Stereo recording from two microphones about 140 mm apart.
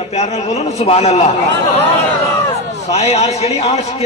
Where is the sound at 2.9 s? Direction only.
50° left (ahead or behind).